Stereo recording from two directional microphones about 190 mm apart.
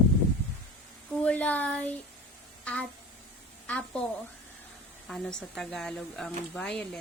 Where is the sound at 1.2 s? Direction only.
5° left (ahead or behind).